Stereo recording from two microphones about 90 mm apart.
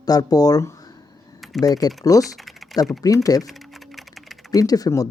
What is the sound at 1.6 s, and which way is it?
Speech, 45° left (ahead or behind).